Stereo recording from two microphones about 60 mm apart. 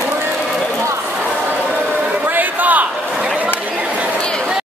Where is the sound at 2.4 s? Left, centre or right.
Right.